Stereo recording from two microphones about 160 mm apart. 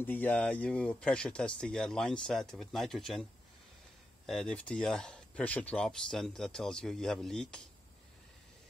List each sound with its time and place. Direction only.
0.0 s speech: 10° left (ahead or behind)
4.3 s speech: 5° left (ahead or behind)